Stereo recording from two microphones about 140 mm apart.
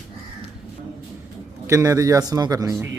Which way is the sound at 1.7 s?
20° right (ahead or behind).